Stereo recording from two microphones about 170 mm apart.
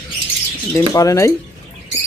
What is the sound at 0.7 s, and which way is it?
Speech, 20° left (ahead or behind).